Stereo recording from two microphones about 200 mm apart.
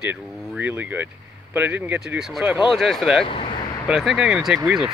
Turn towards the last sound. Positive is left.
turn(degrees=-5)  # may be behind; listen again after turning